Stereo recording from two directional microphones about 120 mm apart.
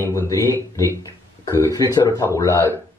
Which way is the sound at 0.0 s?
25° left (ahead or behind).